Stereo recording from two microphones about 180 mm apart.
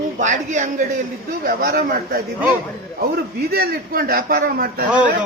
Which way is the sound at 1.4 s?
55° right (ahead or behind).